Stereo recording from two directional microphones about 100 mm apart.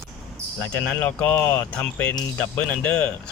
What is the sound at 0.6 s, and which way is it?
Speech, 15° left (ahead or behind).